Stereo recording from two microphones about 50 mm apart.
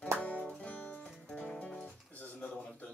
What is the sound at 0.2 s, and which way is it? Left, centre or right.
Music, left.